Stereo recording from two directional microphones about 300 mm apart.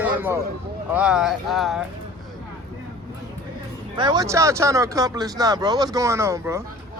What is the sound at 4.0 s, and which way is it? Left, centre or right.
Speech, centre.